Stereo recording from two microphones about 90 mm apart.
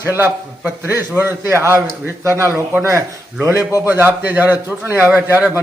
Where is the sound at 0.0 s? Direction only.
25° right (ahead or behind).